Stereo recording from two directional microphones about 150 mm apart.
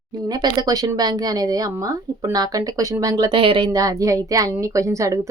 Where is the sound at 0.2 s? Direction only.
25° right (ahead or behind).